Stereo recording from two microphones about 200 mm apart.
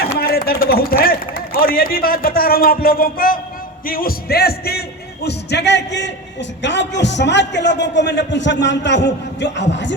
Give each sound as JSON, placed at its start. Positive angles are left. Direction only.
{"t": 0.2, "sound": "a sound", "side_deg": 50}
{"t": 3.8, "sound": "music", "side_deg": 45}
{"t": 5.2, "sound": "a man's voice", "side_deg": 55}